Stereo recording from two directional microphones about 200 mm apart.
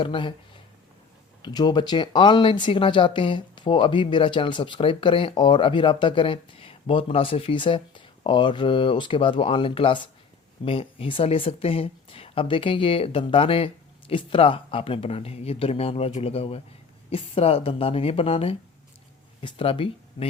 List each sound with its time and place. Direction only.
0.0 s speech: 25° left (ahead or behind)